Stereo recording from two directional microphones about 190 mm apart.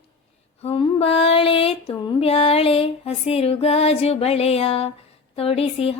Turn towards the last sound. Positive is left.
turn(degrees=30)  # may be behind; listen again after turning